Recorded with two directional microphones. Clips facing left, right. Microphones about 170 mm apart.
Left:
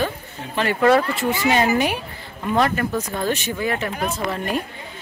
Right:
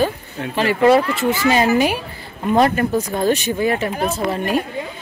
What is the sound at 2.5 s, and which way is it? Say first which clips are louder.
Speech: right 5 dB; 25° right (ahead or behind).